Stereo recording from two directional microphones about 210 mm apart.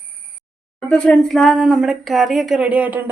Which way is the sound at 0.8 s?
5° left (ahead or behind).